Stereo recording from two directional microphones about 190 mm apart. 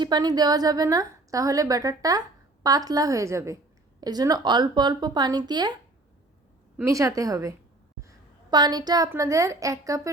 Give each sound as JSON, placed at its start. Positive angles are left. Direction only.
{"t": 0.0, "sound": "a woman's voice", "side_deg": -20}
{"t": 6.7, "sound": "a woman's voice", "side_deg": -15}